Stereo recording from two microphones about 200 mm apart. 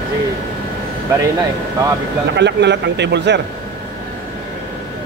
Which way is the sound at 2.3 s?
60° right (ahead or behind).